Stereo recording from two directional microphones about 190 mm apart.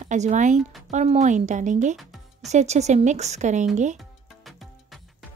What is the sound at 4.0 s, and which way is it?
Music, centre (ahead or behind).